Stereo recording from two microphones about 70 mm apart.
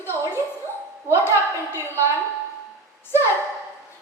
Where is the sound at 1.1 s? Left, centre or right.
Left.